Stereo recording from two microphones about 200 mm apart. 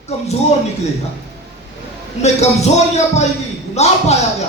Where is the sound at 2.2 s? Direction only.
35° left (ahead or behind).